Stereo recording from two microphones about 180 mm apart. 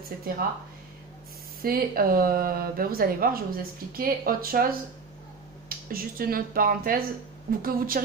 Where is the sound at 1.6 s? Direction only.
55° right (ahead or behind).